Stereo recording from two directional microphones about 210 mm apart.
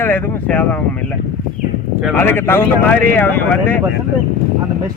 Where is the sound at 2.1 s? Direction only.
10° left (ahead or behind).